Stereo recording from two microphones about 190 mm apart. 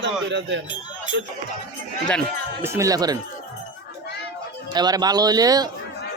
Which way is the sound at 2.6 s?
15° right (ahead or behind).